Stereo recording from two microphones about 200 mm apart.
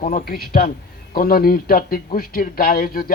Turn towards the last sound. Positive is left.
turn(degrees=45)  # may be behind; listen again after turning